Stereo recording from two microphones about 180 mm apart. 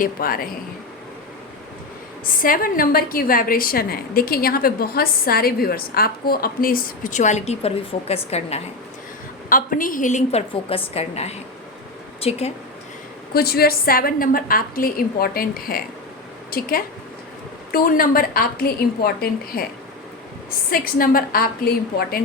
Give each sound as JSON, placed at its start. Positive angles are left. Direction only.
{"t": 0.0, "sound": "a woman's voice", "side_deg": 55}
{"t": 2.4, "sound": "a woman's voice", "side_deg": 50}
{"t": 9.5, "sound": "a woman's voice", "side_deg": 50}
{"t": 10.5, "sound": "a woman's voice", "side_deg": 30}
{"t": 13.3, "sound": "a woman's voice", "side_deg": 60}
{"t": 20.7, "sound": "a woman's voice", "side_deg": 55}